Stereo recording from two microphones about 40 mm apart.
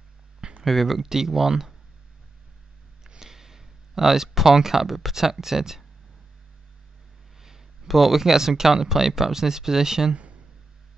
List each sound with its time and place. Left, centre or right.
0.4 s a sound: right
0.7 s speech: centre
1.0 s speech: centre
3.1 s speech: centre
7.3 s speech: centre